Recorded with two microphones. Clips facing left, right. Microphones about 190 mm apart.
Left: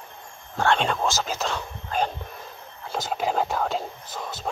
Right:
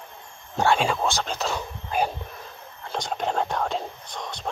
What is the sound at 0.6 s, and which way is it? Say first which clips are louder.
Whispering: right 1 dB; 10° right (ahead or behind).